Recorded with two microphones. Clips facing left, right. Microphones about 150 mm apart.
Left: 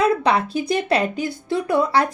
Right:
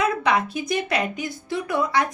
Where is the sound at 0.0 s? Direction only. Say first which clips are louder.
Left 3 dB; 30° left (ahead or behind).